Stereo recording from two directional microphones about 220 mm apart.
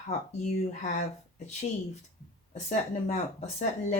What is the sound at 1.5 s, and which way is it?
Speech, 30° left (ahead or behind).